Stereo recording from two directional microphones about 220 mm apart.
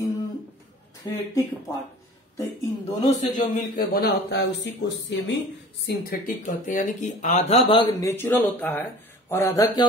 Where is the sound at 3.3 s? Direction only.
35° left (ahead or behind).